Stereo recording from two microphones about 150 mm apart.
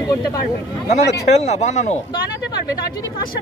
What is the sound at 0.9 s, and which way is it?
Speech, 50° left (ahead or behind).